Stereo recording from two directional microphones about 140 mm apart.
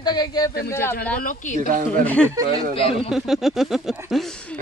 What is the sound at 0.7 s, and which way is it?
Speech, 15° left (ahead or behind).